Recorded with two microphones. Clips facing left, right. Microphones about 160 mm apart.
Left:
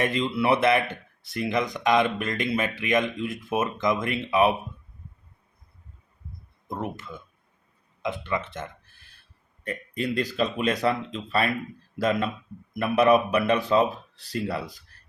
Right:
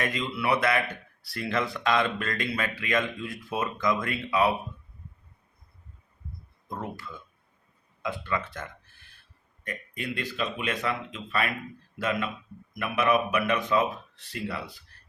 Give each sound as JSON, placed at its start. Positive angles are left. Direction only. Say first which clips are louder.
{"t": 0.0, "sound": "speech", "louder": "left 5 dB", "side_deg": 25}
{"t": 6.7, "sound": "speech", "louder": "left 4 dB", "side_deg": 20}
{"t": 9.6, "sound": "speech", "louder": "left 6 dB", "side_deg": 35}